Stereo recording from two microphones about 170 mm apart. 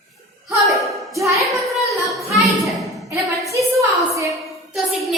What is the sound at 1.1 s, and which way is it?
Speech, 20° right (ahead or behind).